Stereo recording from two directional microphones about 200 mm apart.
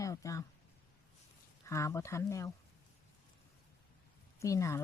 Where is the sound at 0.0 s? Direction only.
15° left (ahead or behind).